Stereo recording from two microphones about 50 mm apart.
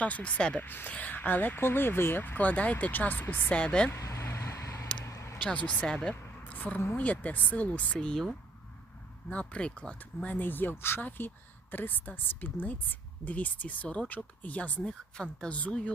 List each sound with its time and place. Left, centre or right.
0.0 s speech: left
0.6 s speech: left
3.5 s speech: left
3.9 s a sound: left
5.0 s vehicle: left
5.4 s speech: left
6.4 s a sound: left
6.9 s speech: left
7.9 s speech: centre
9.3 s speech: left
10.2 s speech: left
11.7 s speech: left
14.8 s speech: centre